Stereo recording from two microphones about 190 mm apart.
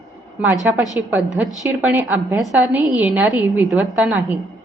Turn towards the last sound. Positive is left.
turn(degrees=-5)  # may be behind; listen again after turning